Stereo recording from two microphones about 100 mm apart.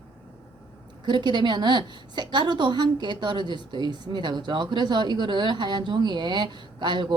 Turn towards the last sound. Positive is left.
turn(degrees=-50)  # may be behind; listen again after turning